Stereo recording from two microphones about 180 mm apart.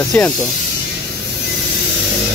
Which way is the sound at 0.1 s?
10° left (ahead or behind).